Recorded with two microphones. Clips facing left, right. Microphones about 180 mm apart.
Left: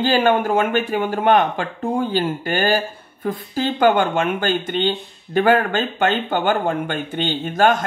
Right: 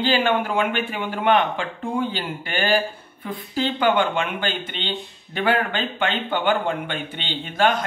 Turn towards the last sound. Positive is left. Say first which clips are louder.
# left 4 dB
turn(degrees=45)  # may be behind; listen again after turning